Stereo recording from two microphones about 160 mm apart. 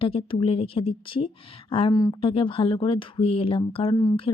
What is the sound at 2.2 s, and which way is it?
Speech, 35° left (ahead or behind).